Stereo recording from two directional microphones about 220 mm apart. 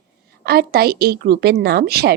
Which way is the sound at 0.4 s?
45° right (ahead or behind).